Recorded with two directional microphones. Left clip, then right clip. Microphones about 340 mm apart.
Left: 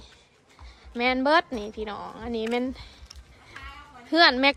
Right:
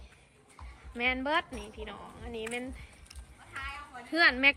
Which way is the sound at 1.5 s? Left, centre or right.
Left.